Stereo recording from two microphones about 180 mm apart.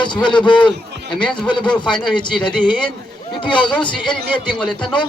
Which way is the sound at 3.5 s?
5° left (ahead or behind).